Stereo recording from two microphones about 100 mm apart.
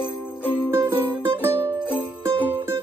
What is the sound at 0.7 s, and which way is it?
Music, 25° right (ahead or behind).